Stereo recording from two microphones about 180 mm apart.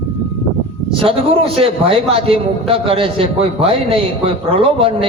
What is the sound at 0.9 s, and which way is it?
A man's voice, 30° right (ahead or behind).